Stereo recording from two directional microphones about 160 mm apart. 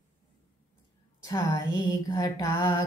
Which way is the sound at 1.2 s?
25° left (ahead or behind).